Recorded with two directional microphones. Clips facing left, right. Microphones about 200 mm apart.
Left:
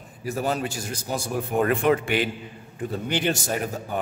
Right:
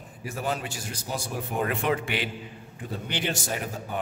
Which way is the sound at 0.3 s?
40° left (ahead or behind).